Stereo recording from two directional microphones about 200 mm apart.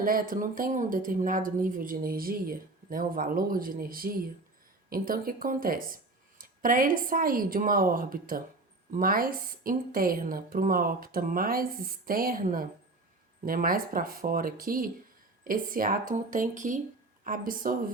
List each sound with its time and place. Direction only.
0.0 s a woman's voice: 45° right (ahead or behind)